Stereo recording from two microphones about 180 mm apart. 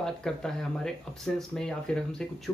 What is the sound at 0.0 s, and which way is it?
Speech, 5° left (ahead or behind).